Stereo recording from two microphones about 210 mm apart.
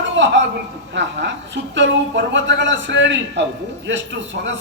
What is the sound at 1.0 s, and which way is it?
Speech, 60° right (ahead or behind).